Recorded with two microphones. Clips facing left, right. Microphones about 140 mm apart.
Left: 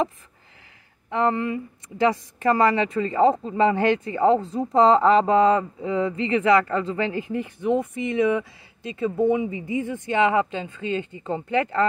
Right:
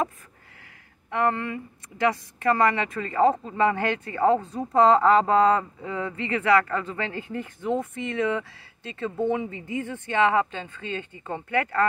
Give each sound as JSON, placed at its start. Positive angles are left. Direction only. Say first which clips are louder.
{"t": 1.1, "sound": "a woman's voice", "louder": "left 3 dB", "side_deg": 20}
{"t": 7.3, "sound": "speech", "louder": "left 4 dB", "side_deg": 15}